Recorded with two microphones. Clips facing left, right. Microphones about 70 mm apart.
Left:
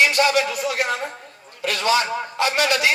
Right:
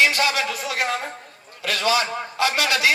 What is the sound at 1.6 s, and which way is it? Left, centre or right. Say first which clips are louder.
A man's voice: left 1 dB; left.